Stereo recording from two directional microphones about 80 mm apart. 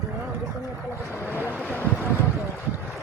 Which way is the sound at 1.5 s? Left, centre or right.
Left.